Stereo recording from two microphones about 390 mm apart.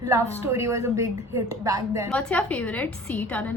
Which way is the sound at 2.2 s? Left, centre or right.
Centre.